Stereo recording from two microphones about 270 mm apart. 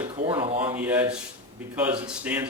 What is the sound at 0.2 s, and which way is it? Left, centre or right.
Speech, centre.